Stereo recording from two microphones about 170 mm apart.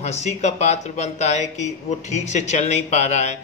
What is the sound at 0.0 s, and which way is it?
Speech, 40° left (ahead or behind).